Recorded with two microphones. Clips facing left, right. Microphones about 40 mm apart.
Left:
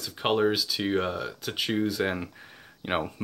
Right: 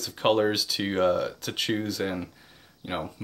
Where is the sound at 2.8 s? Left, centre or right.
Left.